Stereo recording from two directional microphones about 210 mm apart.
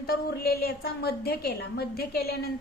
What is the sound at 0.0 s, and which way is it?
A woman's voice, 45° left (ahead or behind).